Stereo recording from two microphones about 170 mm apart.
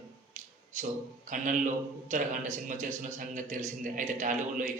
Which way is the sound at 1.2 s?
50° right (ahead or behind).